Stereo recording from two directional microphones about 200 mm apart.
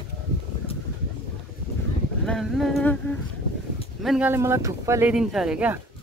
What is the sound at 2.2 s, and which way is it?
Humming, centre (ahead or behind).